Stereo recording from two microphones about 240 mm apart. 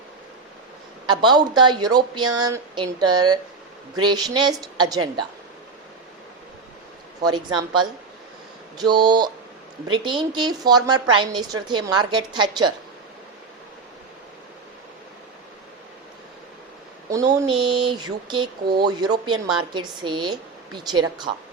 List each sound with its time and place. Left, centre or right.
1.0 s speech: centre
7.2 s speech: centre
17.2 s speech: centre